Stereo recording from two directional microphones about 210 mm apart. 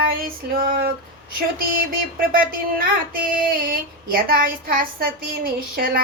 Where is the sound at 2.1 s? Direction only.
45° right (ahead or behind).